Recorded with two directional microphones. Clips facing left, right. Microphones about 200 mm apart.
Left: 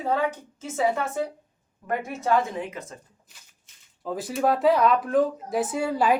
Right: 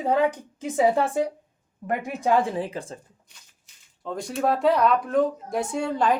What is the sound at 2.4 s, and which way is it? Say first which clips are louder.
Speech: right 4 dB; 30° right (ahead or behind).